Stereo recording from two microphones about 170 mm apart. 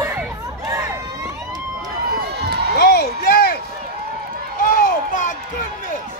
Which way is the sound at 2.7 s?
70° left (ahead or behind).